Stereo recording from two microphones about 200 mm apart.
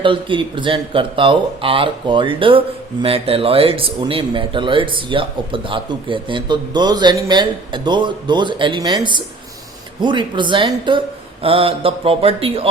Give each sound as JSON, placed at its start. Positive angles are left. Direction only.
{"t": 0.0, "sound": "speech", "side_deg": -25}